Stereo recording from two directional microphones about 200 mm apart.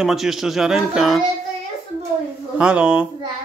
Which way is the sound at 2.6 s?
5° right (ahead or behind).